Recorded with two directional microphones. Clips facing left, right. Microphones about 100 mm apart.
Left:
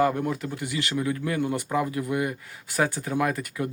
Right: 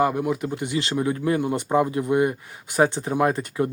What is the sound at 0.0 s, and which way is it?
Speech, 15° right (ahead or behind).